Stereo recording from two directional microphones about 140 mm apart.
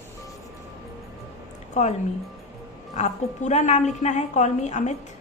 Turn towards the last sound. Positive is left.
turn(degrees=55)  # may be behind; listen again after turning